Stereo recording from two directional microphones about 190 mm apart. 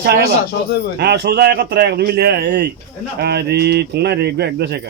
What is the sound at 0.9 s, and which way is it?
A man's voice, 60° right (ahead or behind).